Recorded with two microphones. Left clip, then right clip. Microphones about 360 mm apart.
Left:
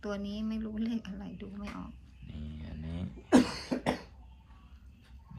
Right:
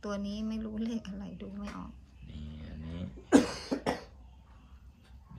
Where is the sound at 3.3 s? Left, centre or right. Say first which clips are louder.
Even; left.